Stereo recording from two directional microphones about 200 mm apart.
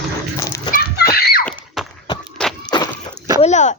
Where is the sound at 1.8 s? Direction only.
Centre (ahead or behind).